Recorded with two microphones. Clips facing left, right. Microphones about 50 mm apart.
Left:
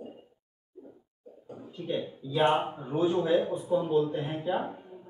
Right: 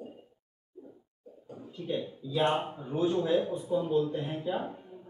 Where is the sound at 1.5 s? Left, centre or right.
Centre.